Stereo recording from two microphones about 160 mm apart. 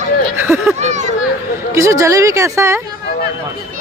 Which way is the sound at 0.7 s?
45° right (ahead or behind).